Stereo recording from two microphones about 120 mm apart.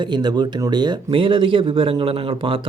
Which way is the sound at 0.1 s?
40° right (ahead or behind).